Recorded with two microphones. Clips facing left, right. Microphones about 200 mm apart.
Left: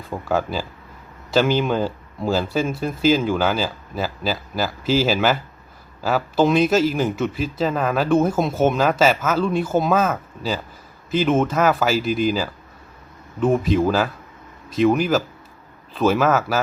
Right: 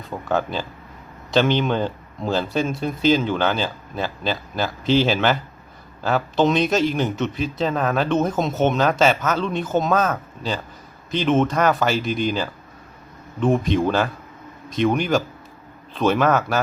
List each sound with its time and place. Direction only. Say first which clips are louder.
0.1 s speech: left 1 dB; 10° left (ahead or behind)